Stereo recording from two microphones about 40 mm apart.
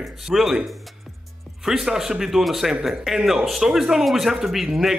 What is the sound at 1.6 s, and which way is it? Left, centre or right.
Speech, centre.